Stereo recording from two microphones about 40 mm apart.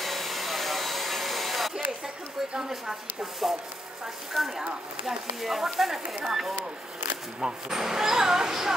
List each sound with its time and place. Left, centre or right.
0.0 s hair dryer: centre
4.3 s speech: centre
6.5 s speech: right
7.7 s speech: centre